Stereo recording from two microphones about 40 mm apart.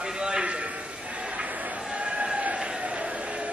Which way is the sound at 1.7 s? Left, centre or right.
Centre.